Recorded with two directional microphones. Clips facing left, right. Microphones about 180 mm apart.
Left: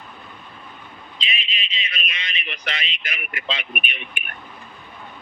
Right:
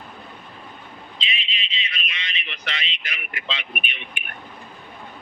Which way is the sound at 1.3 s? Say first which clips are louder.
Left 2 dB; 45° left (ahead or behind).